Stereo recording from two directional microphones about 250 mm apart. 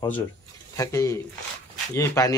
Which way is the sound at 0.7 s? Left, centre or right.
Centre.